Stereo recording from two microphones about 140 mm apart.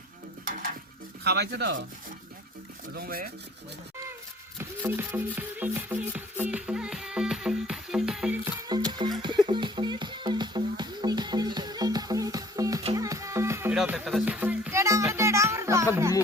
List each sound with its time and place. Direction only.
3.0 s speech: 90° right
4.9 s music: 15° right (ahead or behind)
8.6 s music: 30° right (ahead or behind)
13.7 s music: 10° right (ahead or behind)